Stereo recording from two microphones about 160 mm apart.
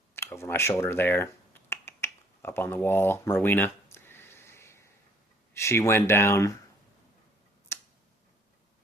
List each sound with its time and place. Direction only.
0.2 s finger snapping: 15° left (ahead or behind)
5.5 s speech: 15° left (ahead or behind)
7.7 s scissors: 15° left (ahead or behind)